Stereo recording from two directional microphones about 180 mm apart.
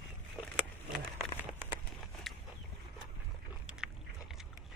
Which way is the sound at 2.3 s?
Centre (ahead or behind).